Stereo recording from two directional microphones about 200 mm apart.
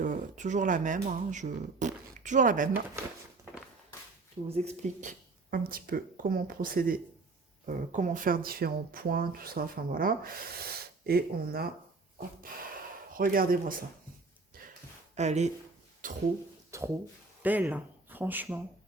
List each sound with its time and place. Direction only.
0.0 s speech: 40° right (ahead or behind)
4.4 s speech: 30° right (ahead or behind); by 11.7 s 50° right (ahead or behind)
13.1 s speech: 45° right (ahead or behind)
15.1 s speech: 35° right (ahead or behind)
16.0 s a sound: 40° right (ahead or behind)
16.7 s speech: 15° right (ahead or behind)